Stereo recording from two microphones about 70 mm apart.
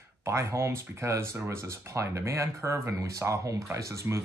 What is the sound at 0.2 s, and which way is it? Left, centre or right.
Speech, right.